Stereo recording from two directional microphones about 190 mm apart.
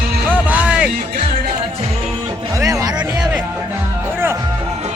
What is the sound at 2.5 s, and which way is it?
Music, 15° right (ahead or behind).